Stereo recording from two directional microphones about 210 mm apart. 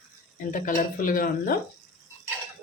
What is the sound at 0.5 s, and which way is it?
Speech, 40° left (ahead or behind).